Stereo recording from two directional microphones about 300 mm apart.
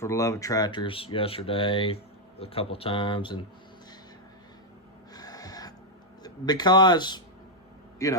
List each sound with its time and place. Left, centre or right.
0.0 s speech: centre
5.1 s owl: centre
6.2 s speech: centre